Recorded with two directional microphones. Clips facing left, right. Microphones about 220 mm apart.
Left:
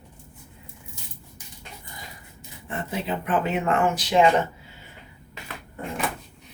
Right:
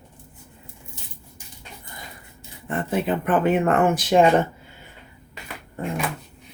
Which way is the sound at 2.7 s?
55° right (ahead or behind).